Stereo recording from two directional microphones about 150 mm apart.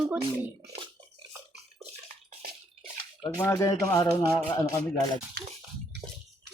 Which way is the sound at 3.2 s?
30° left (ahead or behind).